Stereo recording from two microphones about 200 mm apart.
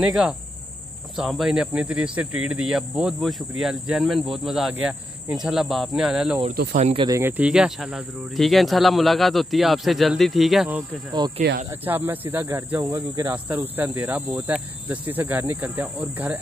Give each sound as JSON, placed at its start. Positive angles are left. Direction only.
{"t": 0.0, "sound": "speech", "side_deg": 0}
{"t": 6.5, "sound": "speech", "side_deg": -45}
{"t": 6.9, "sound": "speech", "side_deg": -25}
{"t": 7.2, "sound": "speech", "side_deg": -10}
{"t": 11.1, "sound": "speech", "side_deg": -20}
{"t": 12.1, "sound": "speech", "side_deg": -10}